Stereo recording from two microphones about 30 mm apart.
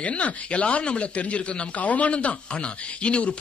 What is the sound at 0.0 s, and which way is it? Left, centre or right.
Speech, left.